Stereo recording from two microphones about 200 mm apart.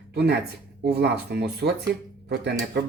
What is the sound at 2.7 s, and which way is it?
Speech, 55° right (ahead or behind).